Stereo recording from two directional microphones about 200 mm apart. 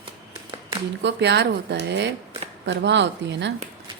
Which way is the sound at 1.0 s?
60° right (ahead or behind).